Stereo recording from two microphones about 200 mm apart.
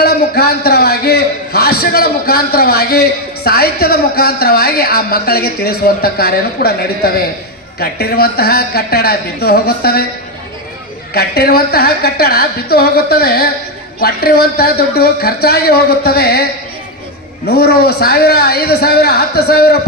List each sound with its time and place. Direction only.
0.0 s a sound: 50° left (ahead or behind)
1.8 s a man's voice: 50° left (ahead or behind)
11.1 s a man's voice: 50° left (ahead or behind)